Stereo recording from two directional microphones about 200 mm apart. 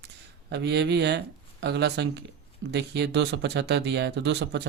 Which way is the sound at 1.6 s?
55° right (ahead or behind).